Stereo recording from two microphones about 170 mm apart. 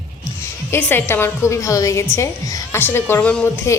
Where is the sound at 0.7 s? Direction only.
10° left (ahead or behind).